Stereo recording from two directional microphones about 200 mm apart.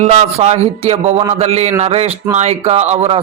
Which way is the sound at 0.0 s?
35° right (ahead or behind).